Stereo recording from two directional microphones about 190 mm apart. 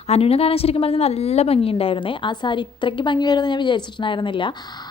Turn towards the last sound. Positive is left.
turn(degrees=25)  # may be behind; listen again after turning